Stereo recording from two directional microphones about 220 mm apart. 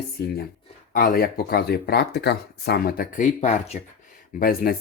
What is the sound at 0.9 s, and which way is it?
Speech, 40° left (ahead or behind).